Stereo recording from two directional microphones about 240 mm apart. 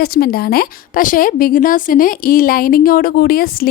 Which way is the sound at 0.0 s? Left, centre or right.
Left.